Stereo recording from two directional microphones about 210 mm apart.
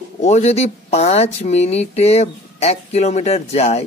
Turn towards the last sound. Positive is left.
turn(degrees=30)  # may be behind; listen again after turning